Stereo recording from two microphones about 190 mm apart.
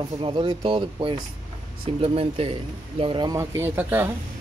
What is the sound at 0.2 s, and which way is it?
Speech, 25° right (ahead or behind).